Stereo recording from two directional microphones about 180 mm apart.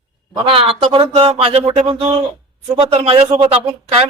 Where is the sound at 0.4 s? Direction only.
30° right (ahead or behind).